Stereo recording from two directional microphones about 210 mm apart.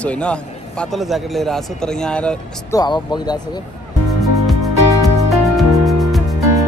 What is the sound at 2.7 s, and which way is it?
Speech, 20° left (ahead or behind).